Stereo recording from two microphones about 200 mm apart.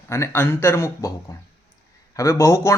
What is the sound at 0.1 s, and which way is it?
Speech, 10° left (ahead or behind).